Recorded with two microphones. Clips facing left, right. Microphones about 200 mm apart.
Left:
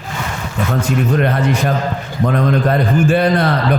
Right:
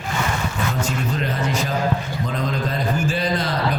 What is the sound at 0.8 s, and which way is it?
A man's voice, 60° left (ahead or behind).